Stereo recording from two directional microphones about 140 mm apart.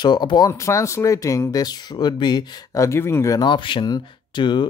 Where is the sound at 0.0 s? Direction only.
30° left (ahead or behind).